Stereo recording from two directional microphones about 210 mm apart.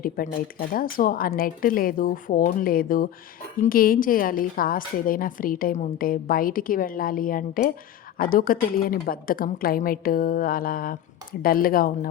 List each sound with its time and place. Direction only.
0.2 s a woman's voice: 45° left (ahead or behind)